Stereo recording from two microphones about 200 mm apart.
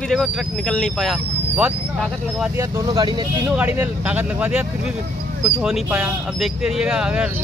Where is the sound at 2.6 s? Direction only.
20° right (ahead or behind).